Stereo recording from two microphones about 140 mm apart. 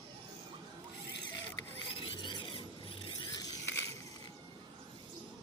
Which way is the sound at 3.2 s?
25° left (ahead or behind).